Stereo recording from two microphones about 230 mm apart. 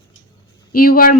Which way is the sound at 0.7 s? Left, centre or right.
Left.